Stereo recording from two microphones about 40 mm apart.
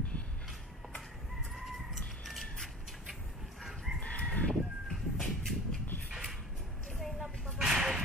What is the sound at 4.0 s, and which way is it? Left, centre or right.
Chicken, left.